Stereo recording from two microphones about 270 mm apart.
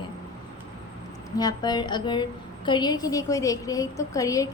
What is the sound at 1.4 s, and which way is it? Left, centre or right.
A woman's voice, centre.